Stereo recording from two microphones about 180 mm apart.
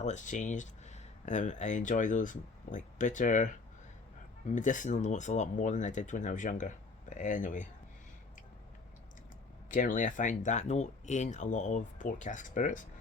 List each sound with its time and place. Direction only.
0.0 s speech: 45° left (ahead or behind)
9.6 s speech: 45° left (ahead or behind)